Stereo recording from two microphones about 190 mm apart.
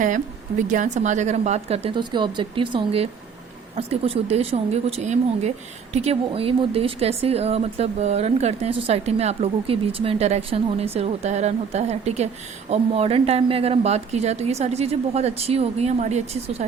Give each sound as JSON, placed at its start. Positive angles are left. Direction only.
{"t": 0.7, "sound": "speech", "side_deg": -40}